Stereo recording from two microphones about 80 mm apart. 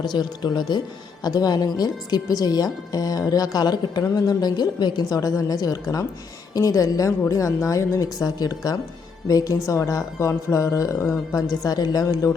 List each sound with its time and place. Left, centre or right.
0.0 s speech: left